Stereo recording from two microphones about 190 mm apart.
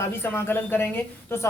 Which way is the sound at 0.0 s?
10° left (ahead or behind).